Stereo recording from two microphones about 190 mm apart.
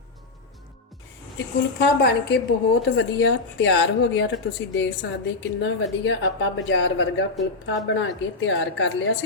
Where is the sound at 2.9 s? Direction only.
75° left (ahead or behind).